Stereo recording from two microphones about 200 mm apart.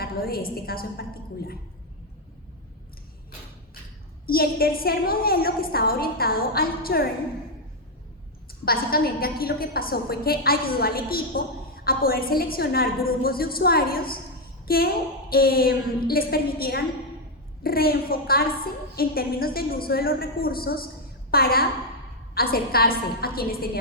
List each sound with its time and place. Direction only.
0.0 s a woman's voice: 50° left (ahead or behind)
4.3 s a woman's voice: 50° left (ahead or behind)
8.6 s a woman's voice: 50° left (ahead or behind)